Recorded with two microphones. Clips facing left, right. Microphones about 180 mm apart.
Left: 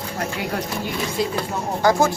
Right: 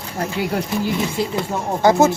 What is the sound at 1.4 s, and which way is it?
Speech, 25° right (ahead or behind).